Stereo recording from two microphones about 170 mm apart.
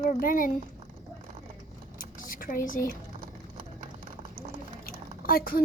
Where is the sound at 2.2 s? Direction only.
55° left (ahead or behind).